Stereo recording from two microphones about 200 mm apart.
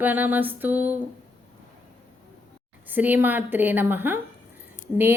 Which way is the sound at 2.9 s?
10° right (ahead or behind).